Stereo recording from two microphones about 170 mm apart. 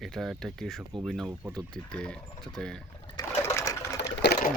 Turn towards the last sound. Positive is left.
turn(degrees=70)  # may be behind; listen again after turning